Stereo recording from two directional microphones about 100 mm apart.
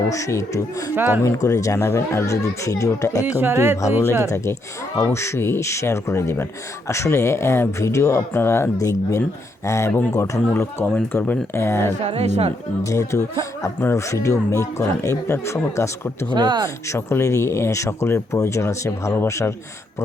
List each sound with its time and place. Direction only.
0.1 s speech: 30° left (ahead or behind)
0.9 s speech: 20° right (ahead or behind)
1.2 s speech: 30° left (ahead or behind)
3.2 s speech: 20° right (ahead or behind)
4.9 s speech: 30° left (ahead or behind)
12.0 s speech: 90° right
12.8 s speech: 35° left (ahead or behind)
16.3 s speech: 50° right (ahead or behind)
16.6 s speech: 30° left (ahead or behind)